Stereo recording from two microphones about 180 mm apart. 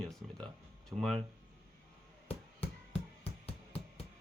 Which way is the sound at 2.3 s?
35° left (ahead or behind).